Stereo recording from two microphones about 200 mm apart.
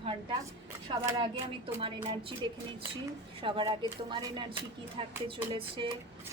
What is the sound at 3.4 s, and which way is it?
A woman's voice, 25° right (ahead or behind).